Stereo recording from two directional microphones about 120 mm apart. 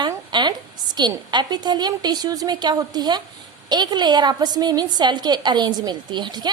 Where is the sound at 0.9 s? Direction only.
40° right (ahead or behind).